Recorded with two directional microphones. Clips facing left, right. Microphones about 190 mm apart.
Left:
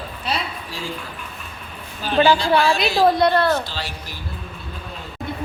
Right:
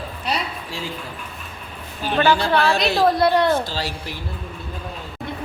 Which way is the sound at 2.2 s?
15° left (ahead or behind).